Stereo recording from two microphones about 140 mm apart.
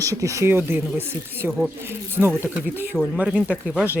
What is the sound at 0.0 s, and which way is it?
Speech, 20° right (ahead or behind).